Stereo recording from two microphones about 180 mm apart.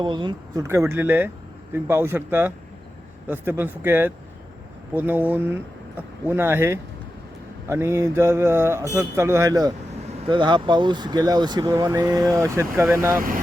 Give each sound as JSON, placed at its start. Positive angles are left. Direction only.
{"t": 0.0, "sound": "mantra", "side_deg": -25}
{"t": 10.2, "sound": "speech", "side_deg": -25}
{"t": 12.9, "sound": "mantra", "side_deg": -15}
{"t": 13.1, "sound": "speech", "side_deg": -50}